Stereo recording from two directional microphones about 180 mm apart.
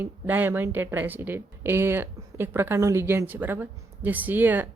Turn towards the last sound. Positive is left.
turn(degrees=-10)  # may be behind; listen again after turning